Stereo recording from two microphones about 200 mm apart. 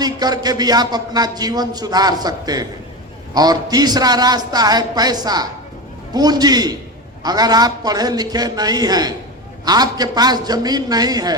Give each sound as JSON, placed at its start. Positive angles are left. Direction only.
{"t": 0.0, "sound": "a man's voice", "side_deg": -20}